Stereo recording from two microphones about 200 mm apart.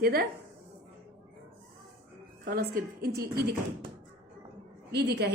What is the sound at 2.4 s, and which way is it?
A woman's voice, 50° right (ahead or behind).